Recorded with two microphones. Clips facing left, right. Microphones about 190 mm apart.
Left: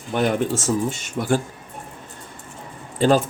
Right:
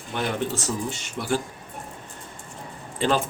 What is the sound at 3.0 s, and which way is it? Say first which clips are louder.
Speech: left 6 dB; 40° left (ahead or behind).